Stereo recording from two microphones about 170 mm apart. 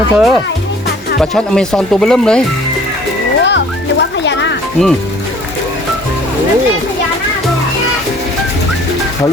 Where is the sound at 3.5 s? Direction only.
90° left.